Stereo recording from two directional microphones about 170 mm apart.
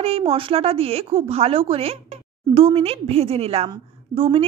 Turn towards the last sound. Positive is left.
turn(degrees=-30)  # may be behind; listen again after turning